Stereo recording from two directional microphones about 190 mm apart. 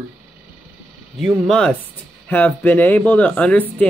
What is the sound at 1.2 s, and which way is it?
Speech, 5° left (ahead or behind).